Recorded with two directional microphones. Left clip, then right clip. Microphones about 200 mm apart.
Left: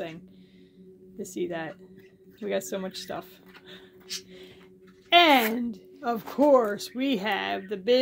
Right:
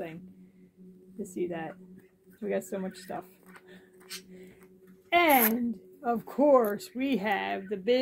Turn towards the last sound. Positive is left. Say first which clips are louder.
# left 2 dB
turn(degrees=15)  # may be behind; listen again after turning